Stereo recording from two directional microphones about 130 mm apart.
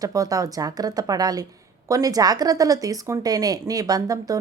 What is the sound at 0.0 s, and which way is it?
A woman's voice, 25° right (ahead or behind).